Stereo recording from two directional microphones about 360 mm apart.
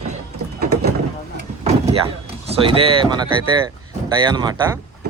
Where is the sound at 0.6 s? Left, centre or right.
Right.